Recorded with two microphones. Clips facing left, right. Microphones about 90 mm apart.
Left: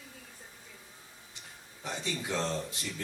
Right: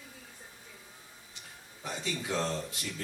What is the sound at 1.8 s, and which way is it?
Speech, 20° left (ahead or behind).